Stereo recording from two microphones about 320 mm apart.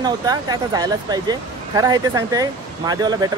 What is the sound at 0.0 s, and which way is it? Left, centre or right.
Speech, centre.